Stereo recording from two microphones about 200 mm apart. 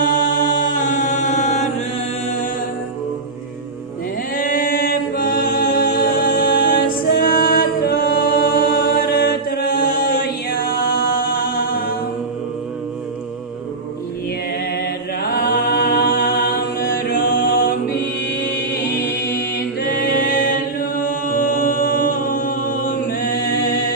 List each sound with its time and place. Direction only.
0.0 s mantra: 45° left (ahead or behind)
4.4 s a capella: 45° left (ahead or behind)
15.5 s music: 45° left (ahead or behind)
17.0 s mantra: 45° left (ahead or behind)
19.9 s chant: 45° left (ahead or behind)